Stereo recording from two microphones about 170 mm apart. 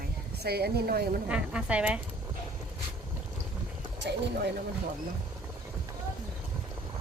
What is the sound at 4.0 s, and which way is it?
Speech, 75° right (ahead or behind).